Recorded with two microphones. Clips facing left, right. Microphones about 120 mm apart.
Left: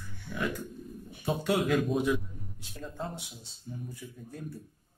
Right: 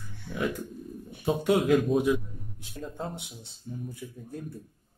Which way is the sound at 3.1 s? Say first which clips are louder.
Right 2 dB; 60° right (ahead or behind).